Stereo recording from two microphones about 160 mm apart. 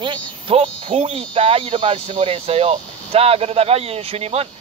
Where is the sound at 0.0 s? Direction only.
35° right (ahead or behind).